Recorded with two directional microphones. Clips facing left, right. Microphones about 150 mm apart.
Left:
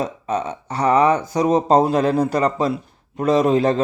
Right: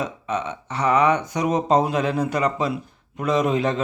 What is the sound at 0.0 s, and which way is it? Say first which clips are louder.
A man's voice: left 3 dB; 35° left (ahead or behind).